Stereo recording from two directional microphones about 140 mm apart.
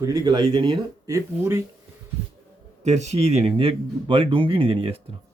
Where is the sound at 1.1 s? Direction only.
20° right (ahead or behind).